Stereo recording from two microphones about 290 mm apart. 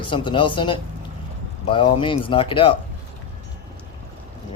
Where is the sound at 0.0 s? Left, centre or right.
Centre.